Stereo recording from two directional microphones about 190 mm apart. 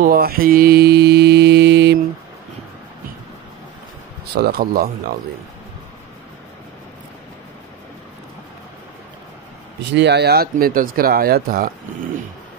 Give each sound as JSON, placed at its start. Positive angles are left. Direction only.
{"t": 0.0, "sound": "mantra", "side_deg": -50}
{"t": 4.4, "sound": "speech", "side_deg": -55}
{"t": 9.9, "sound": "speech", "side_deg": -65}